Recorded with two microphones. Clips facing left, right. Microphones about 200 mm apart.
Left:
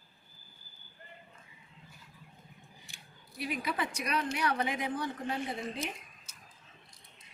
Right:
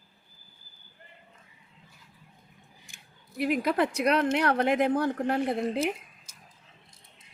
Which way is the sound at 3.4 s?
60° right (ahead or behind).